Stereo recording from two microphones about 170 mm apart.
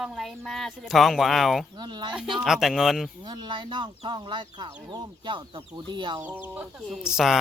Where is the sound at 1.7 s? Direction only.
25° right (ahead or behind).